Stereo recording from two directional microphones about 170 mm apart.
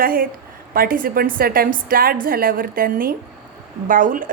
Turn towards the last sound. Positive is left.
turn(degrees=-50)  # may be behind; listen again after turning